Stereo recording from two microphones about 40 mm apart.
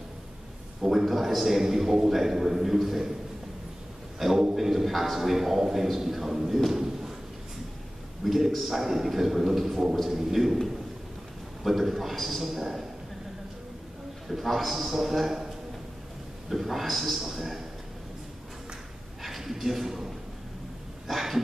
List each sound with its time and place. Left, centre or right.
0.7 s a man's voice: centre
4.2 s a man's voice: centre
6.7 s a sound: centre
8.2 s a man's voice: centre
11.6 s a man's voice: centre
14.2 s a man's voice: centre
19.2 s speech: centre
21.1 s a sound: centre